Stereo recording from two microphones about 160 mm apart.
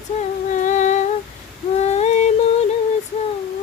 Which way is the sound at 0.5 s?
50° left (ahead or behind).